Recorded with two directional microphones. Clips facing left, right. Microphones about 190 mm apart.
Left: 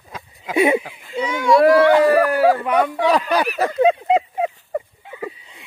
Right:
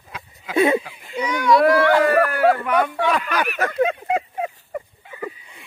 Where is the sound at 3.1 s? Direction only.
35° left (ahead or behind).